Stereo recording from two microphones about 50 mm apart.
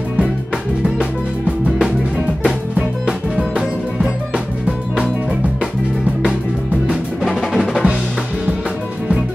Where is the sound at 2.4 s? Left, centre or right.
Centre.